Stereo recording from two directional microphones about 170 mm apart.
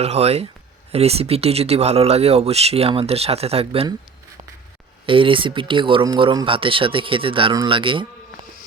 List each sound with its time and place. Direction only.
0.0 s speech: 40° right (ahead or behind)
5.0 s speech: 30° right (ahead or behind)